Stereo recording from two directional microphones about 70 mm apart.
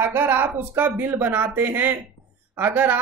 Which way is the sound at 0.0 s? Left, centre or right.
Right.